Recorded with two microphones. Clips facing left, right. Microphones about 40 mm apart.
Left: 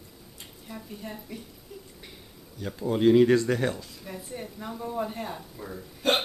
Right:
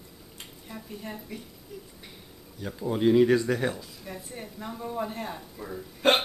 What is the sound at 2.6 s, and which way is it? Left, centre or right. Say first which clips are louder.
Speech: left 2 dB; centre.